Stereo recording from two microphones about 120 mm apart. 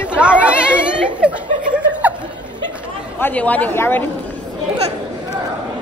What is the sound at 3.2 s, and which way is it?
Speech, 15° left (ahead or behind).